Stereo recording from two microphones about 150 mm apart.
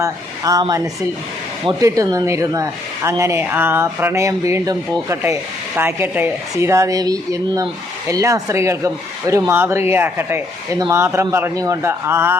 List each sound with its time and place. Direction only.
0.0 s a man's voice: 25° right (ahead or behind)